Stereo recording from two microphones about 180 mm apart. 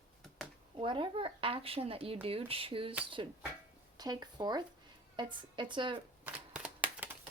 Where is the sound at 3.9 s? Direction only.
20° right (ahead or behind).